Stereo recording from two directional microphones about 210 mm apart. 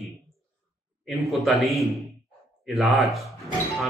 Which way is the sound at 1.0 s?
Centre (ahead or behind).